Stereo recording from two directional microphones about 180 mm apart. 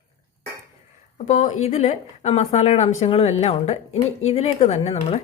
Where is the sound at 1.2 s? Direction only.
40° left (ahead or behind).